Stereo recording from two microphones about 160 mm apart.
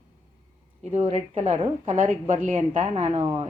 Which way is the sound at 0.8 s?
40° right (ahead or behind).